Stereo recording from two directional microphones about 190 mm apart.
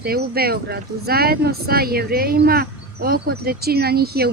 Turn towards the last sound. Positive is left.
turn(degrees=-55)  # may be behind; listen again after turning